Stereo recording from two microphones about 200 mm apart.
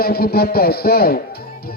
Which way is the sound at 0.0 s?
50° left (ahead or behind).